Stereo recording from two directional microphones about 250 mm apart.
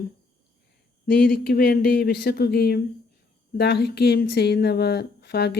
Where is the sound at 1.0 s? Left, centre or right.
Left.